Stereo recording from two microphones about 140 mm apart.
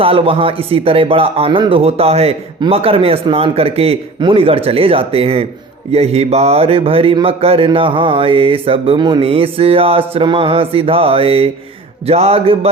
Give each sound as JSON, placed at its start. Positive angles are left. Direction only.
{"t": 0.0, "sound": "speech", "side_deg": -40}